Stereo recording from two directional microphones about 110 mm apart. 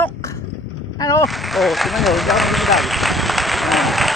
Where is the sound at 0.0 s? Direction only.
30° left (ahead or behind).